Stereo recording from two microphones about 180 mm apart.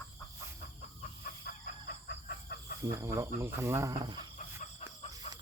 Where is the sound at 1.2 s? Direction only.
60° left (ahead or behind).